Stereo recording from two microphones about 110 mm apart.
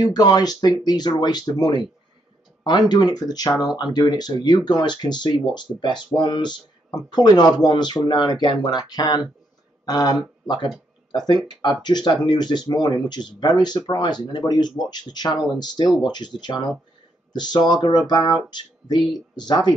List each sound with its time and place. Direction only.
0.0 s speech: 40° left (ahead or behind)
15.3 s speech: 5° right (ahead or behind)
15.6 s speech: 40° left (ahead or behind)